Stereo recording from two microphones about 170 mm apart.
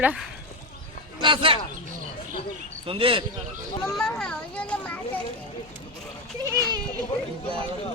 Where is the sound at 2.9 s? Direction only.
30° right (ahead or behind).